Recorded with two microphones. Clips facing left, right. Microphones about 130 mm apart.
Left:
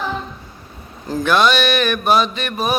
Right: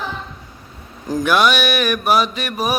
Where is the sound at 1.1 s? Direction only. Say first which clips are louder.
Even; 10° right (ahead or behind).